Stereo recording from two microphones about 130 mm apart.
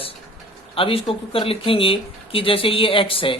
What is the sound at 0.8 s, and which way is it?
Speech, 45° left (ahead or behind).